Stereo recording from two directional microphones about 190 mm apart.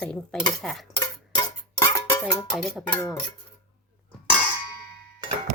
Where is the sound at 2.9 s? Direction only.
15° left (ahead or behind).